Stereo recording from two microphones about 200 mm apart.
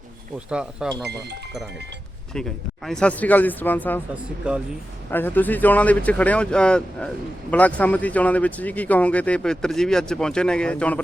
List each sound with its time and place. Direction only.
0.5 s speech: 5° right (ahead or behind)
2.3 s speech: 5° left (ahead or behind)
4.1 s speech: 5° right (ahead or behind)
5.1 s speech: 10° left (ahead or behind)